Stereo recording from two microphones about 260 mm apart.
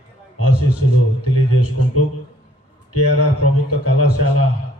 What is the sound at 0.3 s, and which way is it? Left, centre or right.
A man's voice, left.